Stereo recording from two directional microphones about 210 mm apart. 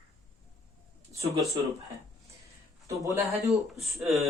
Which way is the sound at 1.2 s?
30° right (ahead or behind).